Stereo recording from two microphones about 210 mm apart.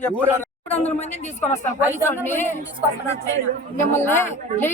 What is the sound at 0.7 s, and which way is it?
Speech, 30° left (ahead or behind).